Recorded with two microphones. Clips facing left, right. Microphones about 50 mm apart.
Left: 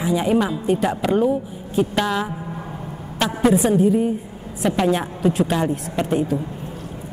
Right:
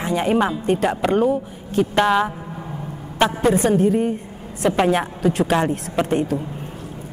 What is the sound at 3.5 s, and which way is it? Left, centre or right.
Speech, right.